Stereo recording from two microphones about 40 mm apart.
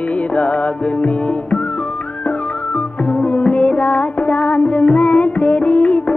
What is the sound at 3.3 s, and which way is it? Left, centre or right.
Music, left.